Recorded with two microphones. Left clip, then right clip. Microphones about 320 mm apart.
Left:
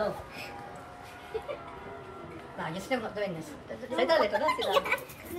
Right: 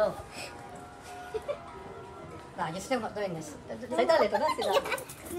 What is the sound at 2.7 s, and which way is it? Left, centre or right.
Speech, right.